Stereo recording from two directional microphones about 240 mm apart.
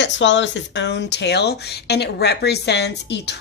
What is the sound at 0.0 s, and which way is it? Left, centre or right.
A woman's voice, left.